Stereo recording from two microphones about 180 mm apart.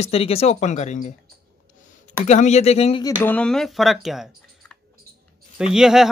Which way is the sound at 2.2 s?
40° left (ahead or behind).